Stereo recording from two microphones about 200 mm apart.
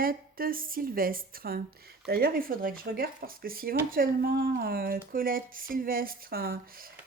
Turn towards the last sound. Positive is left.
turn(degrees=-50)  # may be behind; listen again after turning